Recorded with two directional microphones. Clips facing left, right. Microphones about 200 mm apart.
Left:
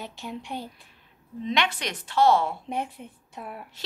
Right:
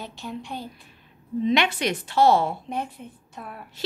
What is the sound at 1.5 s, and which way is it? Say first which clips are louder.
Speech: right 4 dB; 10° right (ahead or behind).